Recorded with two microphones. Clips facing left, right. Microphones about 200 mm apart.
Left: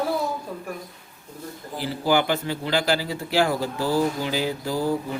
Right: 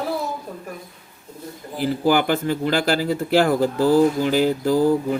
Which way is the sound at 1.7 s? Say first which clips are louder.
Right 4 dB; 50° right (ahead or behind).